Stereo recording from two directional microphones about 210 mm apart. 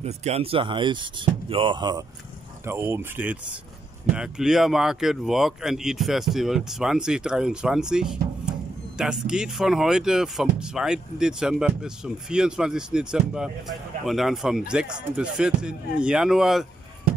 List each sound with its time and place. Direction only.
0.0 s speech: 30° right (ahead or behind); by 16.6 s centre (ahead or behind)